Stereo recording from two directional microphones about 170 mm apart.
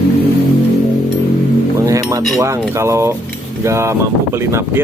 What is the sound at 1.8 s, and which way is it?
Speech, 20° right (ahead or behind).